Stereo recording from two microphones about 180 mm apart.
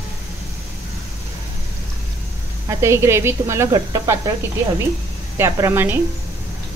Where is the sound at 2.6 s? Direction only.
15° right (ahead or behind).